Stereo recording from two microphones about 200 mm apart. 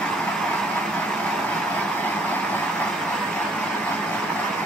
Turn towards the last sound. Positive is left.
turn(degrees=5)  # may be behind; listen again after turning